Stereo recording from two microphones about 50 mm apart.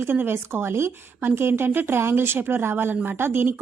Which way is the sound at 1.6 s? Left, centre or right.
Right.